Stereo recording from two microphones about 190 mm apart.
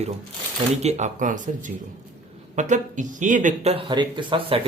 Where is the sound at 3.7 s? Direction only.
25° right (ahead or behind).